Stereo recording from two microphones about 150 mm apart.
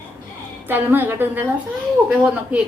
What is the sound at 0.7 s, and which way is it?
A woman's voice, 15° right (ahead or behind).